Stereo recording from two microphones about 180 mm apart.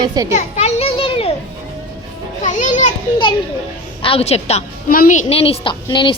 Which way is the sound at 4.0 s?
30° left (ahead or behind).